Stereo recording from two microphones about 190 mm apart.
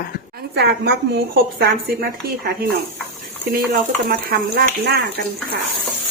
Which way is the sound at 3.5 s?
50° right (ahead or behind).